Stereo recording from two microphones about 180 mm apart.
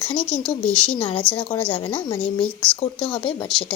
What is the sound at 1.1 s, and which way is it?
Speech, 10° left (ahead or behind).